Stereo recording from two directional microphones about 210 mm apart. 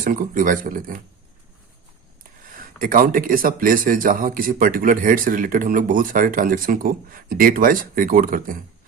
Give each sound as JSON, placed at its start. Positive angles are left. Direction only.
{"t": 0.0, "sound": "speech", "side_deg": -40}
{"t": 2.7, "sound": "speech", "side_deg": -40}